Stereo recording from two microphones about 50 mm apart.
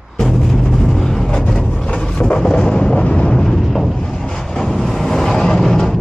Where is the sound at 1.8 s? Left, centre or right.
Centre.